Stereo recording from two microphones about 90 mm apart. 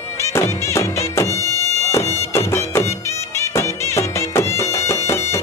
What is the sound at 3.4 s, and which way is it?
Music, 30° left (ahead or behind).